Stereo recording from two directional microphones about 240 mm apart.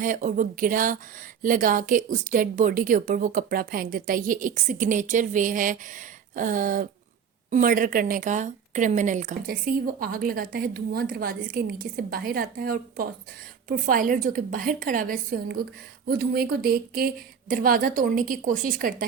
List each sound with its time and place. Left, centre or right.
0.0 s a woman's voice: right